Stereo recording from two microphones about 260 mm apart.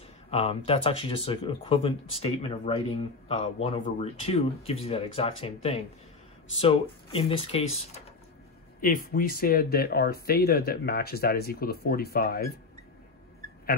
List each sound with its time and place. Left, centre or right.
0.3 s speech: left